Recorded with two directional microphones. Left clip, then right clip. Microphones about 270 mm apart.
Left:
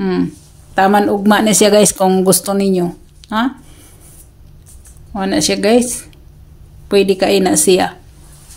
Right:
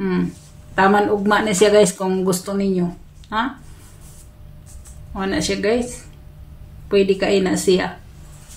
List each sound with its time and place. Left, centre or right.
0.0 s speech: left
5.1 s speech: left
6.9 s speech: left